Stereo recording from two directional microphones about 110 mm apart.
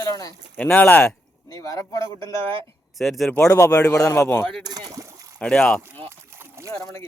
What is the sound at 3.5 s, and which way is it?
Speech, 30° left (ahead or behind).